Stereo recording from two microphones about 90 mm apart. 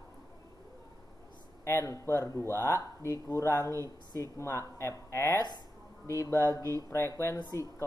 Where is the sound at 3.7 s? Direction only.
35° right (ahead or behind).